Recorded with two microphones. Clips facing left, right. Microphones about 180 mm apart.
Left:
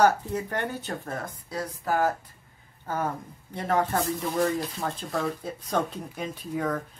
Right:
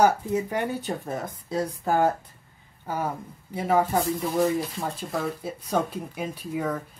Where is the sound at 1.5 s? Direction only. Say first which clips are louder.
Right 4 dB; 30° right (ahead or behind).